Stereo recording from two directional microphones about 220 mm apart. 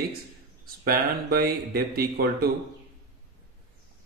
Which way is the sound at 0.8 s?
45° right (ahead or behind).